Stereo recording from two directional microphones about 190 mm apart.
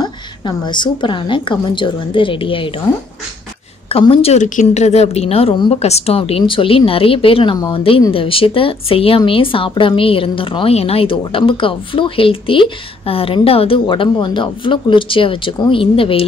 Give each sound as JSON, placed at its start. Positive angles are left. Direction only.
{"t": 0.0, "sound": "a woman's voice", "side_deg": 25}
{"t": 3.9, "sound": "a woman's voice", "side_deg": 30}